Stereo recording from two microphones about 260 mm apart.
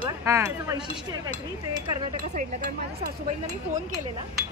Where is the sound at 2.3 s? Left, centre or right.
Right.